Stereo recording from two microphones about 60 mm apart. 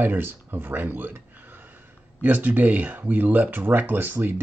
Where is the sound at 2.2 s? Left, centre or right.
Right.